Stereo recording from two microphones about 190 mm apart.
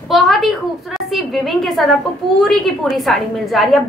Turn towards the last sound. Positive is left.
turn(degrees=0)  # may be behind; listen again after turning